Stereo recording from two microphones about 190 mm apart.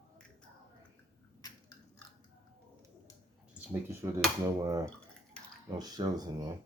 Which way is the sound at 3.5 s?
10° right (ahead or behind).